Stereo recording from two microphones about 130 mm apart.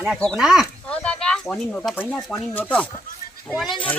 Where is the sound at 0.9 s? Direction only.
10° left (ahead or behind).